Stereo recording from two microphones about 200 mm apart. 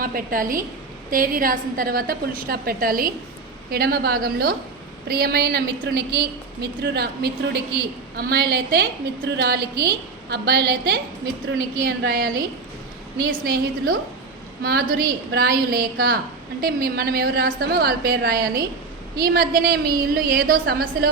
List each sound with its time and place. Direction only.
0.0 s a woman's voice: 45° right (ahead or behind)
13.4 s a woman's voice: 50° right (ahead or behind)